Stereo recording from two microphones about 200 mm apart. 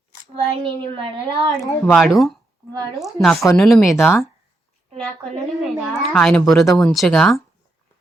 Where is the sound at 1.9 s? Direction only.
Centre (ahead or behind).